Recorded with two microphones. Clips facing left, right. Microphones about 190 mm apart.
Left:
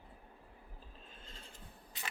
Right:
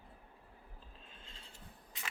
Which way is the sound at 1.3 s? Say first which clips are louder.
Left 3 dB; 40° left (ahead or behind).